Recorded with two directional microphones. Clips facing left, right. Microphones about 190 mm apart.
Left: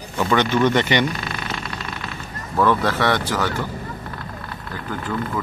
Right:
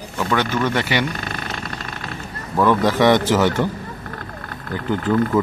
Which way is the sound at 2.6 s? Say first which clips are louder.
Right 3 dB; 15° right (ahead or behind).